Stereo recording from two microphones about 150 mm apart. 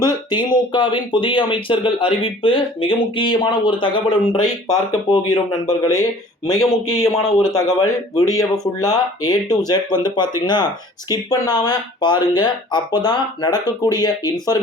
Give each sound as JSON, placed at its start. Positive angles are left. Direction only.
{"t": 0.0, "sound": "speech", "side_deg": 30}